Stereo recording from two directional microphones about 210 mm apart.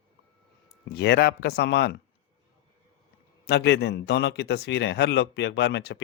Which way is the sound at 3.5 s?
55° left (ahead or behind).